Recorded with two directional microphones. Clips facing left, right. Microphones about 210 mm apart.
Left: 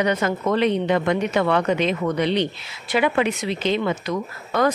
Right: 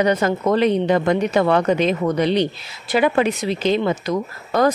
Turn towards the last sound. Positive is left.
turn(degrees=-35)  # may be behind; listen again after turning